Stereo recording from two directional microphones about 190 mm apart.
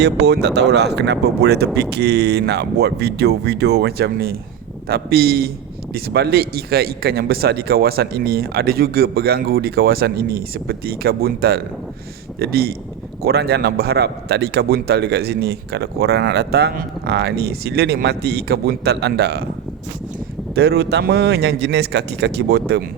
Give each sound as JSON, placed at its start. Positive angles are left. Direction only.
{"t": 0.0, "sound": "a man's voice", "side_deg": -60}
{"t": 20.6, "sound": "a man's voice", "side_deg": -60}